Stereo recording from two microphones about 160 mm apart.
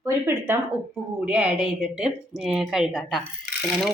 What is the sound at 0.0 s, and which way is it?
A woman's voice, 15° right (ahead or behind).